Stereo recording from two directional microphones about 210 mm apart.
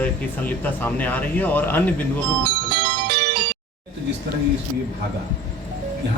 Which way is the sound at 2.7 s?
50° right (ahead or behind).